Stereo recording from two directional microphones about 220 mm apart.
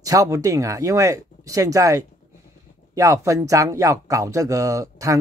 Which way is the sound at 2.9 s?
15° right (ahead or behind).